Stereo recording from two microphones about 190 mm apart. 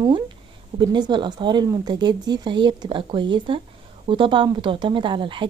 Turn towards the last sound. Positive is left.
turn(degrees=-25)  # may be behind; listen again after turning